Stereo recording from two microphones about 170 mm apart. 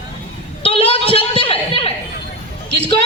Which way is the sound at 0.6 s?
35° left (ahead or behind).